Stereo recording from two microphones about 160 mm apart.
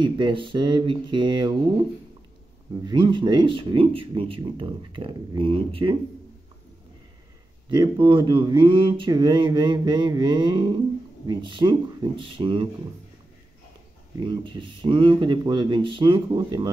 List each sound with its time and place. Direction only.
0.0 s speech: 30° right (ahead or behind)
2.8 s speech: 30° right (ahead or behind)
7.7 s speech: 30° right (ahead or behind)
14.2 s speech: 30° right (ahead or behind)